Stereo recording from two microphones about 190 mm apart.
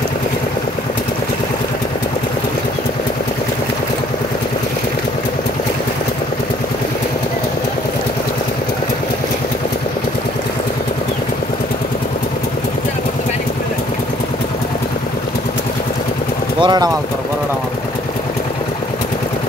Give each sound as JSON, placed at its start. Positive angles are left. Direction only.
{"t": 16.6, "sound": "speech", "side_deg": -20}